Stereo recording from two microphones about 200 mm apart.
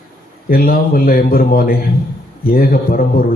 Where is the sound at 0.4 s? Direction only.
45° left (ahead or behind).